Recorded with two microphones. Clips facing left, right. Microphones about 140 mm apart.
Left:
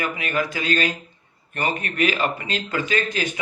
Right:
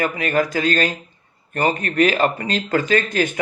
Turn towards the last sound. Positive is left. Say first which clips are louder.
# right 5 dB
turn(degrees=-50)  # may be behind; listen again after turning